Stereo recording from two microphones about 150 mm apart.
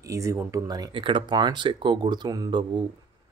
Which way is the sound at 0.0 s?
20° right (ahead or behind).